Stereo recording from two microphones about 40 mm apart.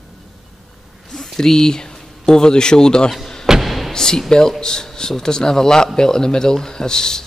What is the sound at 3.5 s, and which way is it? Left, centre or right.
Thump, centre.